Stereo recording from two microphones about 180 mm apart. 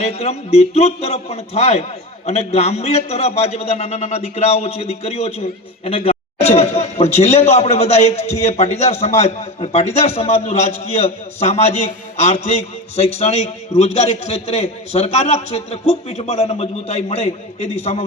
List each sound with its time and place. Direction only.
0.0 s a man's voice: 35° left (ahead or behind)